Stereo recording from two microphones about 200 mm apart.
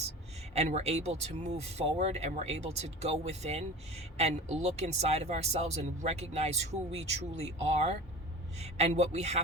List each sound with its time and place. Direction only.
0.5 s speech: 35° right (ahead or behind)